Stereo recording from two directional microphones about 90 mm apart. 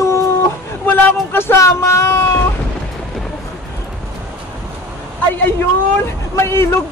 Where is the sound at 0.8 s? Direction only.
25° left (ahead or behind).